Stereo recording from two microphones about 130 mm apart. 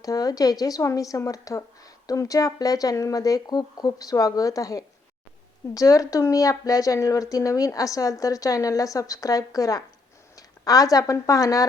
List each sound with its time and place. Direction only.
0.0 s speech: 30° left (ahead or behind)